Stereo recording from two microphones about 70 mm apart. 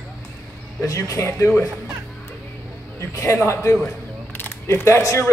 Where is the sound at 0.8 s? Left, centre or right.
Left.